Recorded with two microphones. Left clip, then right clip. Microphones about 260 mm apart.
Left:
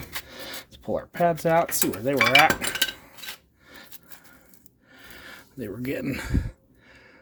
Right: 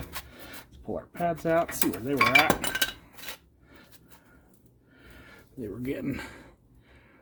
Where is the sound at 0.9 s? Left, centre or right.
Left.